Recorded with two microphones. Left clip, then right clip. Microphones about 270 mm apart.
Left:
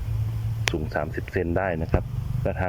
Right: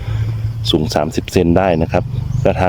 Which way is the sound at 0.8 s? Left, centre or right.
Centre.